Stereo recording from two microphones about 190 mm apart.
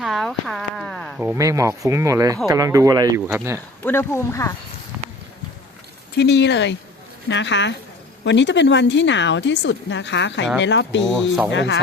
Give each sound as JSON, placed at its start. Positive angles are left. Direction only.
{"t": 0.0, "sound": "a sound", "side_deg": 0}
{"t": 1.2, "sound": "speech", "side_deg": -15}
{"t": 3.8, "sound": "speech", "side_deg": 10}
{"t": 6.1, "sound": "a woman's voice", "side_deg": 65}
{"t": 11.1, "sound": "speech", "side_deg": 0}
{"t": 11.5, "sound": "a woman's voice", "side_deg": 70}